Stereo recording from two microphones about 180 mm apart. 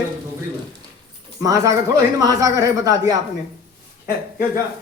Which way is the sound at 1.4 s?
20° right (ahead or behind).